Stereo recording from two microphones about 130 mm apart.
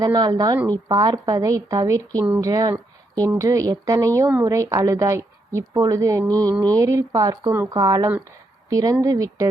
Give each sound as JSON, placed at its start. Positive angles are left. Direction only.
{"t": 0.0, "sound": "a woman's voice", "side_deg": -30}